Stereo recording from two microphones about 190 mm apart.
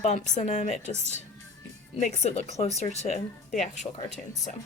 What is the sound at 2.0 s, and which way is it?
Speech, 40° left (ahead or behind).